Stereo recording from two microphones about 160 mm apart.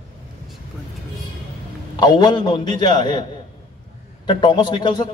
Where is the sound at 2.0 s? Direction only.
25° left (ahead or behind).